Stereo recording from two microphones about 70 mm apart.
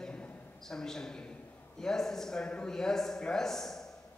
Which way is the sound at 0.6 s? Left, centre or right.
Centre.